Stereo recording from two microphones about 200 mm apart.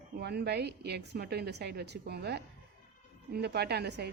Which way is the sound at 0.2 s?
55° right (ahead or behind).